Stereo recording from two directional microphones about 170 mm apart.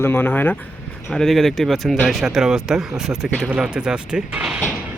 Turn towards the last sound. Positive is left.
turn(degrees=-5)  # may be behind; listen again after turning